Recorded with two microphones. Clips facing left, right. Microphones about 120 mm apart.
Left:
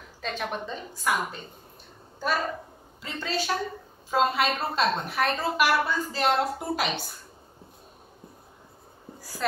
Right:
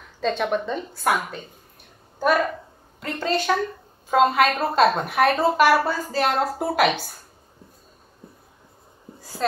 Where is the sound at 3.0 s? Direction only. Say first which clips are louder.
Right 6 dB; 55° right (ahead or behind).